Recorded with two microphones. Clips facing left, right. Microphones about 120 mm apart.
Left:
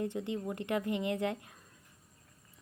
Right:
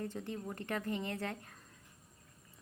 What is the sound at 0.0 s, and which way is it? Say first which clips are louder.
Speech: left 6 dB; 20° left (ahead or behind).